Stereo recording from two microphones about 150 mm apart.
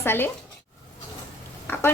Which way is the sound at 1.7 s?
15° left (ahead or behind).